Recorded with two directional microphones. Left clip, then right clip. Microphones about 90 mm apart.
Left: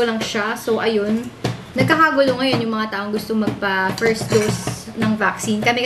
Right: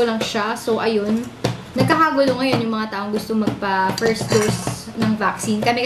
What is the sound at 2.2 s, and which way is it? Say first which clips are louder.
A woman's voice: left 1 dB; 15° right (ahead or behind).